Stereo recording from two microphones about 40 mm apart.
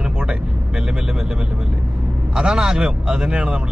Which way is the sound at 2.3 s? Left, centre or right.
Centre.